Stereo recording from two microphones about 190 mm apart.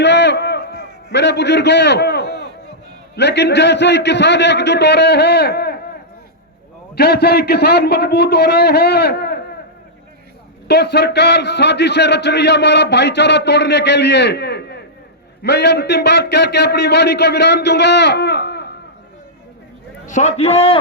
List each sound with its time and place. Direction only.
0.0 s a sound: 65° left (ahead or behind)
3.2 s a man's voice: 65° left (ahead or behind)
6.9 s a man's voice: 60° left (ahead or behind)
10.7 s a man's voice: 60° left (ahead or behind)
20.1 s a man's voice: 40° left (ahead or behind)